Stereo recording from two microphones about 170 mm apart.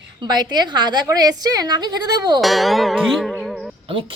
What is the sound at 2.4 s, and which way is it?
Music, centre (ahead or behind).